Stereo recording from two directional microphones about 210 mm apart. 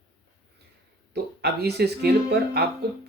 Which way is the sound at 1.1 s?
50° right (ahead or behind).